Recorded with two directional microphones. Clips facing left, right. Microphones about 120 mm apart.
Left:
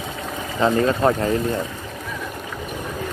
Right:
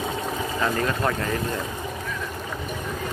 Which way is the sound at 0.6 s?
25° left (ahead or behind).